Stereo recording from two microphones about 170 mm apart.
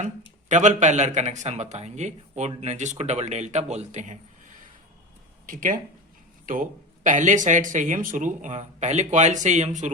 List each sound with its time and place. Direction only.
0.4 s speech: 45° right (ahead or behind)
5.5 s speech: 55° right (ahead or behind)